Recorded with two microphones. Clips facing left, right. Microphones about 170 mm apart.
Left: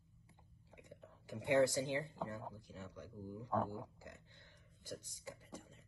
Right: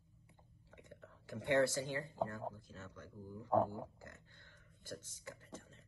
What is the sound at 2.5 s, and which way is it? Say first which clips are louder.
Speech: left 2 dB; 15° left (ahead or behind).